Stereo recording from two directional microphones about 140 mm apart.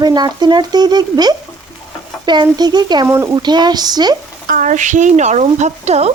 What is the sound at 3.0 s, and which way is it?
Speech, 20° right (ahead or behind).